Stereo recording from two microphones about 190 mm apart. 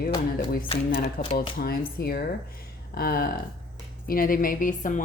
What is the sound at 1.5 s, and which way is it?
A woman's voice, 55° left (ahead or behind).